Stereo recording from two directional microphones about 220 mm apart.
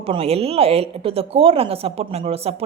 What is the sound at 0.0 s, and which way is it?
A woman's voice, 25° right (ahead or behind).